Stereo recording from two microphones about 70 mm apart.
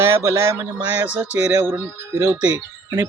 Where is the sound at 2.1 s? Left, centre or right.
Right.